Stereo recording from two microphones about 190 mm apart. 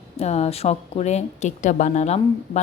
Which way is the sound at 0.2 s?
35° left (ahead or behind).